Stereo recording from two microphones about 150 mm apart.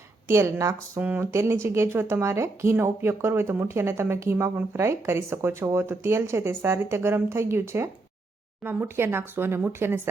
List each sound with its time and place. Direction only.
0.3 s speech: 20° right (ahead or behind)